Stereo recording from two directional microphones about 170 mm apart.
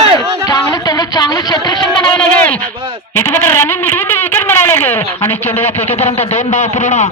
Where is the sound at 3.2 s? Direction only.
10° left (ahead or behind).